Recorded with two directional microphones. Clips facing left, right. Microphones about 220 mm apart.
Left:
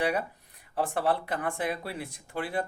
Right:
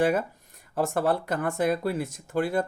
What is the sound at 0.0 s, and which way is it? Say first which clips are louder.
Speech: right 5 dB; 45° right (ahead or behind).